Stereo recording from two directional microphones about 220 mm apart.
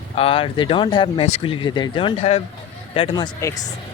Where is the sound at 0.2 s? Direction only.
25° left (ahead or behind).